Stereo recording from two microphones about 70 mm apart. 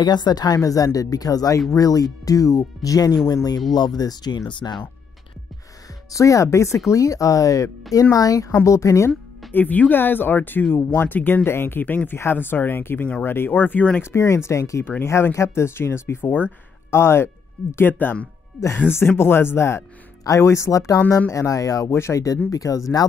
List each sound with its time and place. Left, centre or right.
0.0 s a woman's voice: left
3.7 s speech: left
6.1 s speech: left
9.5 s speech: left
14.1 s speech: left
17.9 s speech: left
18.9 s speech: left